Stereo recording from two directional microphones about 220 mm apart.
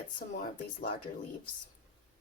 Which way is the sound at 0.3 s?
40° left (ahead or behind).